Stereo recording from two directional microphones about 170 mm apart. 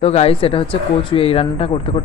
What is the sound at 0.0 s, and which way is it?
Speech, 35° left (ahead or behind).